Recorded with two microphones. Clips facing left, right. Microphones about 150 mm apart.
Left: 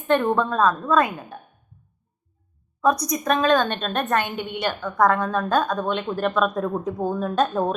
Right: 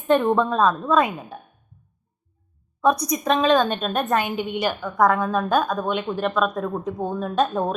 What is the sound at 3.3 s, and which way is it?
Speech, 25° right (ahead or behind).